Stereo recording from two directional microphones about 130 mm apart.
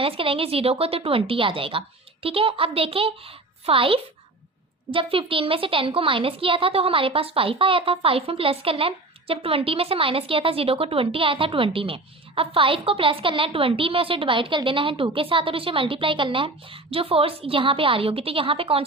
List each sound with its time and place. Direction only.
0.0 s a woman's voice: 45° right (ahead or behind)